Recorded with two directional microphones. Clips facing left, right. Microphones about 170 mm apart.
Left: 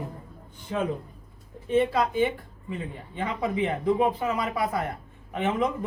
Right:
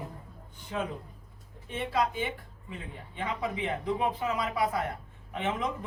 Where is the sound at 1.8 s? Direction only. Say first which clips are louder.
Left 7 dB; 55° left (ahead or behind).